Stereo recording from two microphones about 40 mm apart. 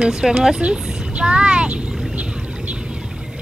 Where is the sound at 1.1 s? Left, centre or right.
Right.